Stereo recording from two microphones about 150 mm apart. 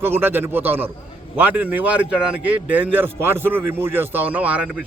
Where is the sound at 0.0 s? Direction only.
15° right (ahead or behind).